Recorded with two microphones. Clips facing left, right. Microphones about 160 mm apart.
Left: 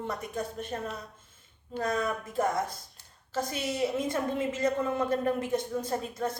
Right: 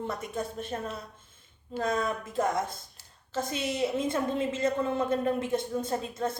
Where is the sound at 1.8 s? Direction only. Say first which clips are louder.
Right 1 dB; 25° right (ahead or behind).